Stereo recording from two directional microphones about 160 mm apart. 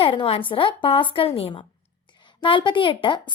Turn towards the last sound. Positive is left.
turn(degrees=30)  # may be behind; listen again after turning